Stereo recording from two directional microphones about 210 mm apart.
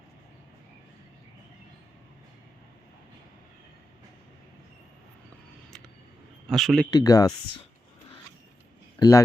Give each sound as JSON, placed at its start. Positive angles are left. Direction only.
{"t": 6.5, "sound": "speech", "side_deg": 0}
{"t": 6.9, "sound": "speech", "side_deg": 15}
{"t": 9.0, "sound": "speech", "side_deg": 15}